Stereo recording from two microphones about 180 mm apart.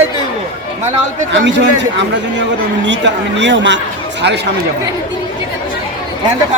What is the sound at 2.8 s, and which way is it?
Speech, 80° right.